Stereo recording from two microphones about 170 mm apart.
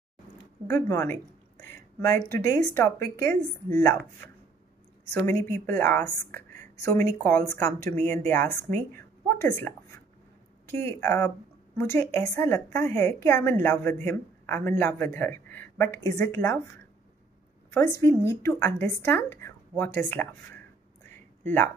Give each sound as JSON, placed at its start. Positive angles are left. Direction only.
{"t": 0.7, "sound": "a woman's voice", "side_deg": 15}
{"t": 2.2, "sound": "a woman's voice", "side_deg": 15}
{"t": 5.1, "sound": "a woman's voice", "side_deg": 15}
{"t": 18.0, "sound": "a woman's voice", "side_deg": 15}